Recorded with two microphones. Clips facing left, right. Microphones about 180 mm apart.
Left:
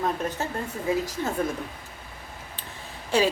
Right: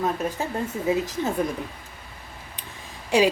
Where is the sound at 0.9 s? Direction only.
20° right (ahead or behind).